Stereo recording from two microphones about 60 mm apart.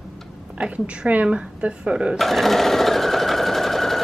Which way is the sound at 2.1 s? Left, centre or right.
Centre.